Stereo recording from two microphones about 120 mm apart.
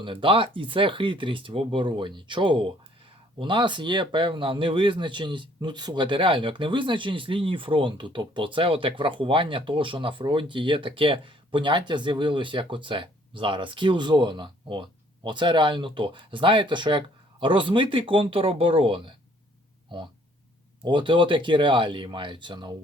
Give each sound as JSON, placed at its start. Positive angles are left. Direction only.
{"t": 0.0, "sound": "speech", "side_deg": -45}